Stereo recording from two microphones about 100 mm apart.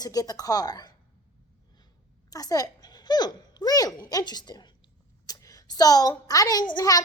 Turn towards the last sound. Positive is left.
turn(degrees=40)  # may be behind; listen again after turning